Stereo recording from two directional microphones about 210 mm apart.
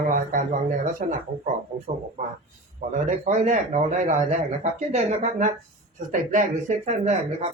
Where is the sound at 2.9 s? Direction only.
35° right (ahead or behind).